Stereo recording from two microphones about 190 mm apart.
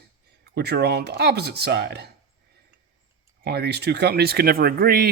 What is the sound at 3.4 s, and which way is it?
Speech, 60° right (ahead or behind).